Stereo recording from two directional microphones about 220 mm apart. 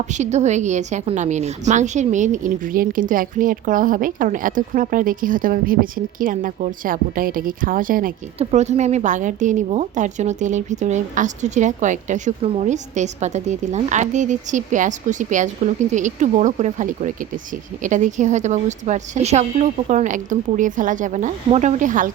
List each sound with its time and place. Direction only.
0.1 s a woman's voice: 30° right (ahead or behind)